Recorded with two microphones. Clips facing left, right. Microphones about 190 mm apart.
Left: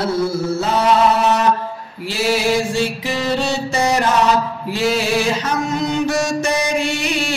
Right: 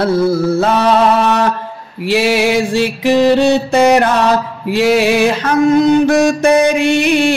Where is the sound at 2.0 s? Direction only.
70° right (ahead or behind).